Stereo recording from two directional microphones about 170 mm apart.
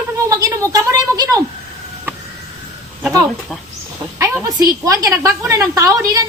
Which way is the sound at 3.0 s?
20° right (ahead or behind).